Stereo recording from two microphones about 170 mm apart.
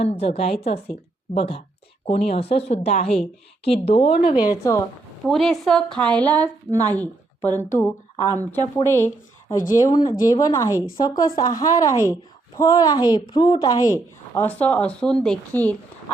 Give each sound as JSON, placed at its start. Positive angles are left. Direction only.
{"t": 0.0, "sound": "speech", "side_deg": 35}
{"t": 4.4, "sound": "a woman's voice", "side_deg": 15}
{"t": 5.2, "sound": "a woman's voice", "side_deg": 0}
{"t": 6.7, "sound": "speech", "side_deg": -20}
{"t": 6.9, "sound": "a woman's voice", "side_deg": 10}